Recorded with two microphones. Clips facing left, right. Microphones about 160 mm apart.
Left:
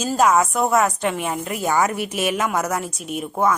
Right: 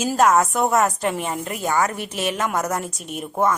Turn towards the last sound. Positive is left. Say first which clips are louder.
# left 1 dB
turn(degrees=0)  # may be behind; listen again after turning